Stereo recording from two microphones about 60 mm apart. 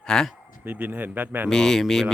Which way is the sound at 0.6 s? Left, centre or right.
Right.